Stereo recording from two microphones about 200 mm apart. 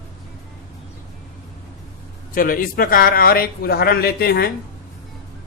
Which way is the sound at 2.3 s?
45° left (ahead or behind).